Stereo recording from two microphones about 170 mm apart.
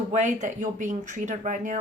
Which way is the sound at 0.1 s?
45° right (ahead or behind).